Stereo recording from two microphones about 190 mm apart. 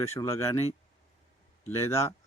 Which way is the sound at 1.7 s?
15° left (ahead or behind).